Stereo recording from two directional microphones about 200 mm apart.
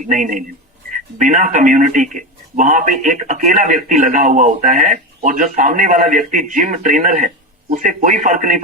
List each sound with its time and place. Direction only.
0.0 s speech: 40° right (ahead or behind)